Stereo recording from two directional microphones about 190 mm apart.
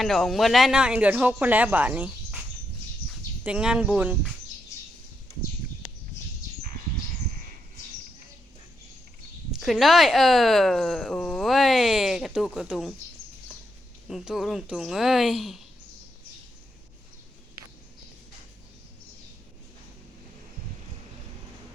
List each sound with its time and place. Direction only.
0.0 s speech: centre (ahead or behind)
3.4 s speech: 5° right (ahead or behind)
9.5 s speech: centre (ahead or behind)
14.1 s speech: centre (ahead or behind)